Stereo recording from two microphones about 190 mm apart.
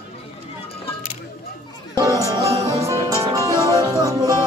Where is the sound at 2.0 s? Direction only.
15° right (ahead or behind).